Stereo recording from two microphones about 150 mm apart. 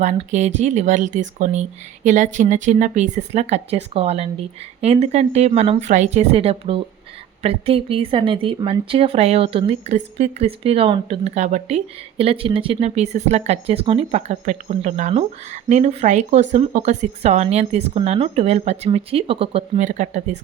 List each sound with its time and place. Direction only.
0.0 s speech: 50° right (ahead or behind)
19.8 s speech: 55° right (ahead or behind)